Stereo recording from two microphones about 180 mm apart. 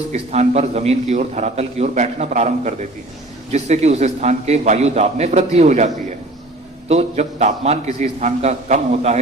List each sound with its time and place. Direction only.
0.1 s a man's voice: 40° right (ahead or behind)